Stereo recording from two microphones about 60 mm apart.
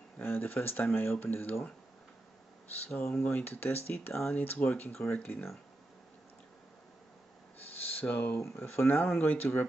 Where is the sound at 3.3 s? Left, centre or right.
Left.